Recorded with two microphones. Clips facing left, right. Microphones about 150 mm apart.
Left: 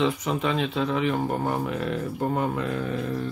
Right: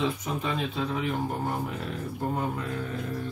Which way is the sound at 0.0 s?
85° left.